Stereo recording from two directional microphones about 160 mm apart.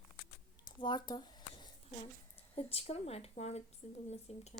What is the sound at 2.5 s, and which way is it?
A woman's voice, 40° left (ahead or behind).